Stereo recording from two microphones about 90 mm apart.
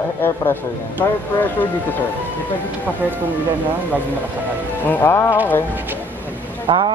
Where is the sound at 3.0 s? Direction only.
20° right (ahead or behind).